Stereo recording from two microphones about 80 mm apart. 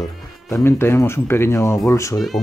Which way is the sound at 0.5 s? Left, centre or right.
Left.